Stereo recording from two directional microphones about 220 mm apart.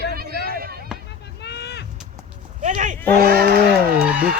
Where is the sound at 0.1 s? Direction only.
45° right (ahead or behind).